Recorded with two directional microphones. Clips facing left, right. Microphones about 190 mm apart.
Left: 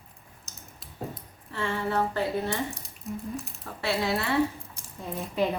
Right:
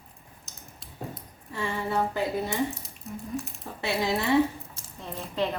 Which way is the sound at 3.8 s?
15° right (ahead or behind).